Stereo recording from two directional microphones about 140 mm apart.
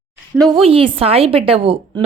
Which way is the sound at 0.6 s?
40° right (ahead or behind).